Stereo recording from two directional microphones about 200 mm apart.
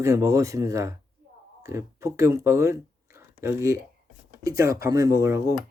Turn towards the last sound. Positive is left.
turn(degrees=-15)  # may be behind; listen again after turning